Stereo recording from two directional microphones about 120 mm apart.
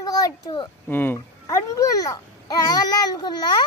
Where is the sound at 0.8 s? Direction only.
15° left (ahead or behind).